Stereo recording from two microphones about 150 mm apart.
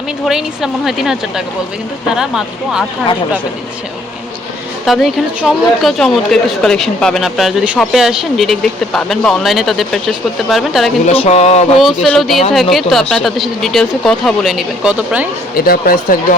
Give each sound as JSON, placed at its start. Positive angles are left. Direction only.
{"t": 0.3, "sound": "speech", "side_deg": -5}
{"t": 4.9, "sound": "speech", "side_deg": 0}
{"t": 11.0, "sound": "speech", "side_deg": 45}
{"t": 12.0, "sound": "speech", "side_deg": 0}
{"t": 15.5, "sound": "speech", "side_deg": 80}